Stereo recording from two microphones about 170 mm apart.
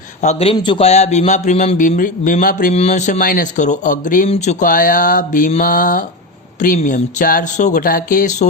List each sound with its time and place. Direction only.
0.2 s a man's voice: 40° left (ahead or behind)
0.5 s a man's voice: 30° left (ahead or behind); by 2.7 s 55° left (ahead or behind)
2.7 s a man's voice: 40° left (ahead or behind)
4.3 s a man's voice: 40° left (ahead or behind)